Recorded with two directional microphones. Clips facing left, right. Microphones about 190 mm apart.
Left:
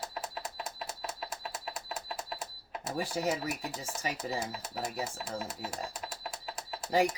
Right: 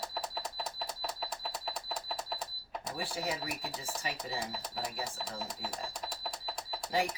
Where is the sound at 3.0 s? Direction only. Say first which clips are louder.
Left 6 dB; 45° left (ahead or behind).